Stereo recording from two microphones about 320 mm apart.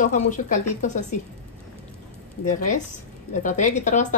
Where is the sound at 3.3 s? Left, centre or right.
Left.